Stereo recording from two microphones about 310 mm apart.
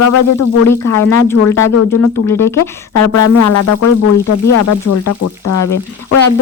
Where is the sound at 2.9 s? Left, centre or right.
Left.